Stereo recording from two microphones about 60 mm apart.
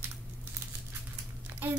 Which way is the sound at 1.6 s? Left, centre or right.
Right.